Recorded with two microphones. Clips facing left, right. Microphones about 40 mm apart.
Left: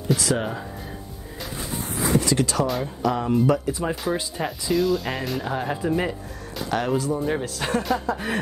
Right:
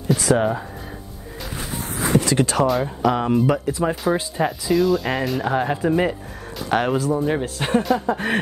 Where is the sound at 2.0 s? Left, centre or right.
Right.